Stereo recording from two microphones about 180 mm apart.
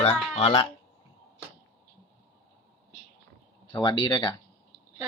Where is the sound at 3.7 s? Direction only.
25° left (ahead or behind).